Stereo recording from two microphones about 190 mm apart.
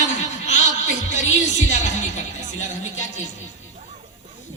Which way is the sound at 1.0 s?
40° left (ahead or behind).